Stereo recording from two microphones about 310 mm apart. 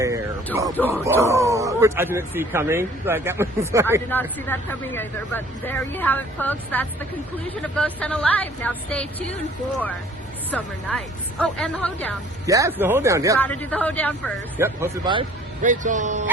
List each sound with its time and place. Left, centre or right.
0.5 s speech: centre
1.0 s speech: centre
4.1 s speech: centre
10.5 s speech: centre
12.5 s speech: centre
13.4 s speech: centre
14.6 s speech: centre
15.6 s speech: right